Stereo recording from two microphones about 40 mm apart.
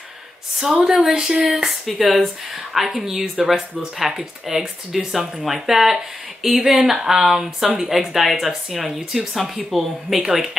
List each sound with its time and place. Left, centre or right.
0.8 s speech: centre
1.1 s speech: centre
1.9 s speech: centre
7.6 s a woman's voice: right
7.9 s speech: centre